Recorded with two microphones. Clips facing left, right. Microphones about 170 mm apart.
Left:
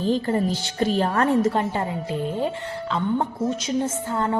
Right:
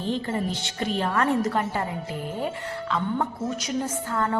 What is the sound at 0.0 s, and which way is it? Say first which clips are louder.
A woman's voice: left 5 dB; 35° left (ahead or behind).